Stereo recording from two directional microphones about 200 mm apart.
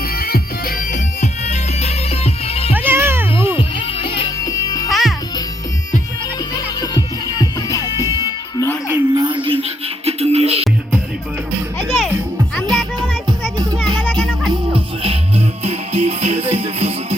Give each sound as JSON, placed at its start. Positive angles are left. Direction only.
{"t": 0.1, "sound": "music", "side_deg": 50}
{"t": 2.7, "sound": "cat", "side_deg": -10}
{"t": 3.6, "sound": "music", "side_deg": 25}
{"t": 4.9, "sound": "music", "side_deg": 0}
{"t": 6.5, "sound": "music", "side_deg": 20}
{"t": 8.9, "sound": "music", "side_deg": -20}
{"t": 11.9, "sound": "music", "side_deg": -5}
{"t": 12.6, "sound": "music", "side_deg": -20}
{"t": 14.0, "sound": "music", "side_deg": 5}
{"t": 14.5, "sound": "music", "side_deg": -25}